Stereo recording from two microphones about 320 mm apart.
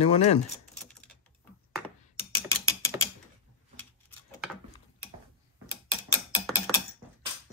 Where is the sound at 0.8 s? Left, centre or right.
Centre.